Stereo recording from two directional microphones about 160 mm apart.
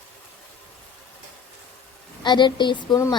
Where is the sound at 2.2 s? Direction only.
30° left (ahead or behind).